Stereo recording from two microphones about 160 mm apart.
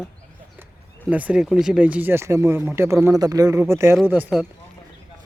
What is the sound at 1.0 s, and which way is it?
Speech, 10° right (ahead or behind).